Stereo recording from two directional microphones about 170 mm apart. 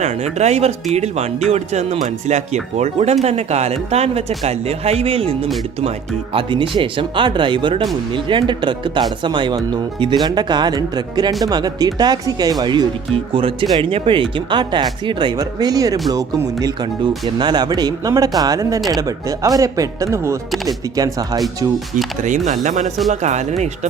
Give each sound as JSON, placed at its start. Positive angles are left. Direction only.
{"t": 0.0, "sound": "speech", "side_deg": -40}
{"t": 22.4, "sound": "speech", "side_deg": -45}